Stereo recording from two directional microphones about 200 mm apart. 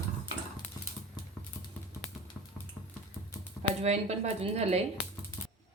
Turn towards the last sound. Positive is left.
turn(degrees=-30)  # may be behind; listen again after turning